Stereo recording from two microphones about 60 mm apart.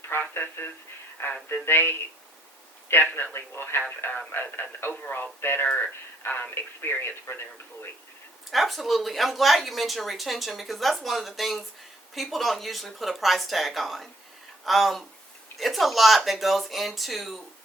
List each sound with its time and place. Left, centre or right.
0.2 s speech: left
8.4 s a woman's voice: centre